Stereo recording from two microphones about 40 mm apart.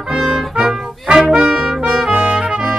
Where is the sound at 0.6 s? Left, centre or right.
Centre.